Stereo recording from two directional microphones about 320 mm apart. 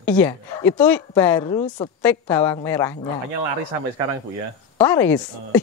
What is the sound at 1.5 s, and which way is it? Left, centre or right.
Speech, centre.